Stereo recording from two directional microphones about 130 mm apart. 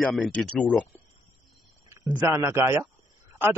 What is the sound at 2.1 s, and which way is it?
Speech, 20° right (ahead or behind).